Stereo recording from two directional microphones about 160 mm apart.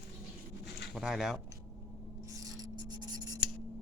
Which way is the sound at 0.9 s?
Centre (ahead or behind).